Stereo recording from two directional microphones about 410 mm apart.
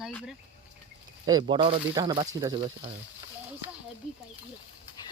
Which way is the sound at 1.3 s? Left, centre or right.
Centre.